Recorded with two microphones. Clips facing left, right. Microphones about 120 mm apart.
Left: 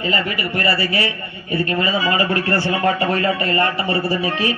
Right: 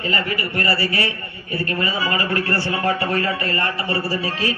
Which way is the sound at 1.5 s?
20° left (ahead or behind).